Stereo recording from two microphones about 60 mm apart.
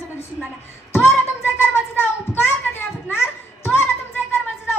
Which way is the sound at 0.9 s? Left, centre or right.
Left.